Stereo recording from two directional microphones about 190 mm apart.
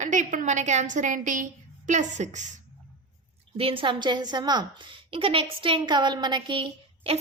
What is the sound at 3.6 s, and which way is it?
A woman's voice, 30° right (ahead or behind).